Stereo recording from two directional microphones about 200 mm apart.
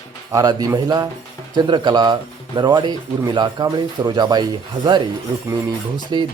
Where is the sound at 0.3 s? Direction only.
15° right (ahead or behind).